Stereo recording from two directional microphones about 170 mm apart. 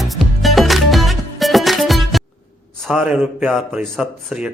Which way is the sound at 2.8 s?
5° right (ahead or behind).